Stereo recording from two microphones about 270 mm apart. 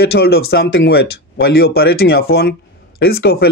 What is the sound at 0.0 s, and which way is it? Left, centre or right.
Speech, left.